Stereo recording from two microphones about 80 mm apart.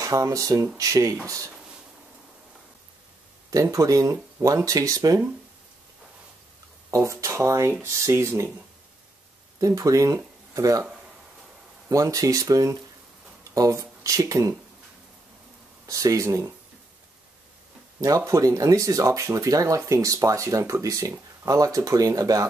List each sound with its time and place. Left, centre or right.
0.0 s speech: right
3.7 s speech: right
6.9 s speech: right
9.6 s speech: right
11.9 s speech: right
15.9 s speech: right
18.0 s speech: right